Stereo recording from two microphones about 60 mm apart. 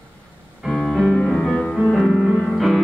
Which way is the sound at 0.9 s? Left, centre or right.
Centre.